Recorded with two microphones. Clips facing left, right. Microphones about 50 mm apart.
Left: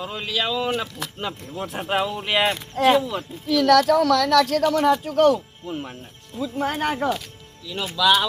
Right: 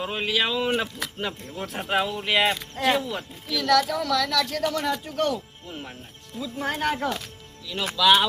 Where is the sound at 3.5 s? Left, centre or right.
Left.